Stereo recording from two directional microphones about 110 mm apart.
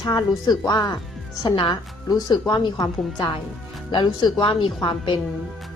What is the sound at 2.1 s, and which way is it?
A woman's voice, 35° left (ahead or behind).